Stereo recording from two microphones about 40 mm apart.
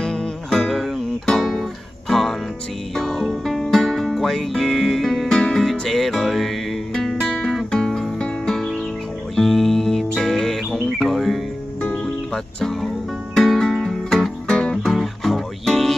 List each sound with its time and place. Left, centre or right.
0.0 s music: left
0.5 s music: centre
5.6 s music: centre
12.6 s music: centre
14.5 s music: centre
14.8 s music: centre